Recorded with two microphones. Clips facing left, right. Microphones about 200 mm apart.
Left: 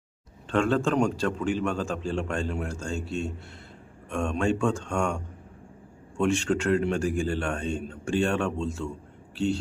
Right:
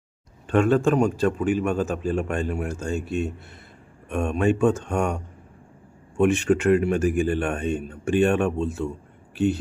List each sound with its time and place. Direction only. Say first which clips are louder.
0.4 s a man's voice: right 5 dB; 15° right (ahead or behind)